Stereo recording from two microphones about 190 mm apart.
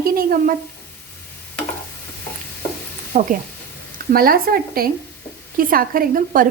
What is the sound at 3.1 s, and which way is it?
A woman's voice, 40° right (ahead or behind).